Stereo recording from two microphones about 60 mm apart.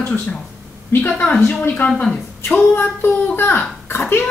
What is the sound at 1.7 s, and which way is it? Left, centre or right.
Speech, left.